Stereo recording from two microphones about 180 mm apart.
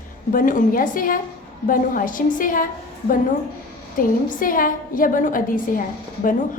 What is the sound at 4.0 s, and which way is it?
A woman's voice, 50° left (ahead or behind).